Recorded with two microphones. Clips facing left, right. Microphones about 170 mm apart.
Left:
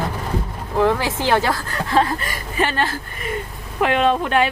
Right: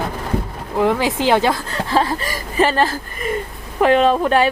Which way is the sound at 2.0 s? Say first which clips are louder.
Even; 35° right (ahead or behind).